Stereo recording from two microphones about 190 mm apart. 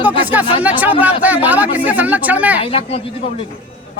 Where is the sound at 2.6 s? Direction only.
30° left (ahead or behind).